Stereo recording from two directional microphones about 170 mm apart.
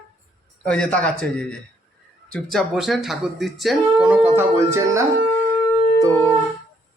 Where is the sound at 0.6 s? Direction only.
5° left (ahead or behind).